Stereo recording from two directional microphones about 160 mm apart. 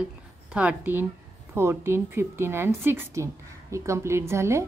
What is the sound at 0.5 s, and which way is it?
A woman's voice, 5° right (ahead or behind).